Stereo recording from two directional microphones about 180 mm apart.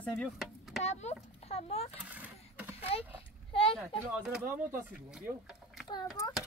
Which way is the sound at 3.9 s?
Centre (ahead or behind).